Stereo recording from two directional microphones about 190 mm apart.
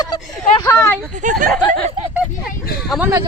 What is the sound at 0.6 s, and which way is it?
Speech, 15° left (ahead or behind).